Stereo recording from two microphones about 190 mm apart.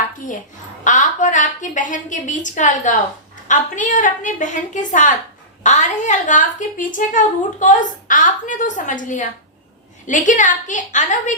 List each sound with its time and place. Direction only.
0.9 s a woman's voice: 40° left (ahead or behind)